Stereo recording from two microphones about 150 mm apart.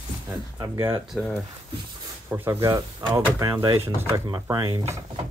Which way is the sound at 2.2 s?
15° right (ahead or behind).